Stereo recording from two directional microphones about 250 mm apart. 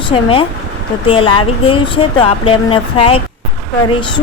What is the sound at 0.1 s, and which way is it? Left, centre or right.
Speech, left.